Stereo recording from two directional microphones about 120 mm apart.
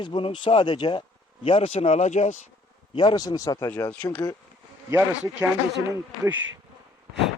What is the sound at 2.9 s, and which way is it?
Speech, 35° left (ahead or behind).